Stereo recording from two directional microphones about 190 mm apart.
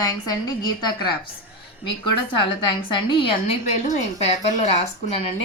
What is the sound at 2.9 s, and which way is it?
A woman's voice, 25° left (ahead or behind).